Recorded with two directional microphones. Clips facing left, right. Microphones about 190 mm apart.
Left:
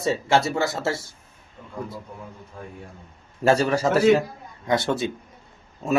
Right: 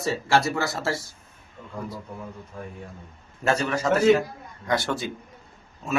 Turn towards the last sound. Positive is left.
turn(degrees=35)  # may be behind; listen again after turning